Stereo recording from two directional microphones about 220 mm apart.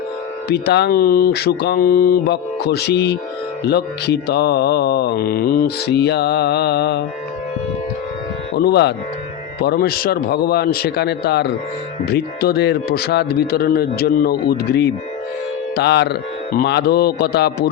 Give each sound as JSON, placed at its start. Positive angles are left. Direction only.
{"t": 0.4, "sound": "mantra", "side_deg": 50}
{"t": 8.5, "sound": "mantra", "side_deg": 50}